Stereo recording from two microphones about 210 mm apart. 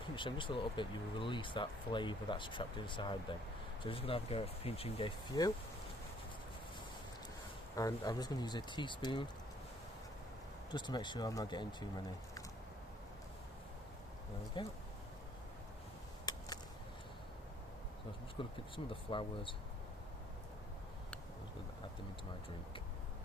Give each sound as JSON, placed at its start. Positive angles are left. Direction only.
{"t": 0.2, "sound": "speech", "side_deg": 25}
{"t": 7.8, "sound": "speech", "side_deg": 15}
{"t": 10.7, "sound": "speech", "side_deg": 20}
{"t": 14.5, "sound": "speech", "side_deg": 25}
{"t": 18.4, "sound": "speech", "side_deg": 25}